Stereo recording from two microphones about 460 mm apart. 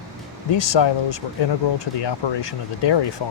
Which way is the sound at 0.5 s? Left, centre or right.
Left.